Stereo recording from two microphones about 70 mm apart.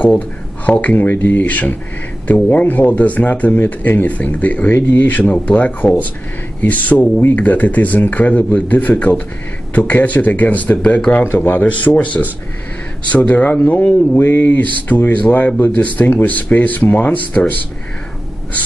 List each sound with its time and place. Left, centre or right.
0.7 s speech: left
11.0 s speech: centre
11.3 s speech: left